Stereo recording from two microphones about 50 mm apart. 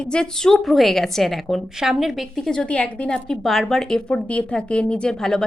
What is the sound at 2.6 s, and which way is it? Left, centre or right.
Speech, left.